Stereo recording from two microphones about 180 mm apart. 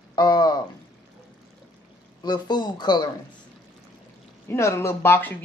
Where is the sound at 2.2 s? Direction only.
25° left (ahead or behind).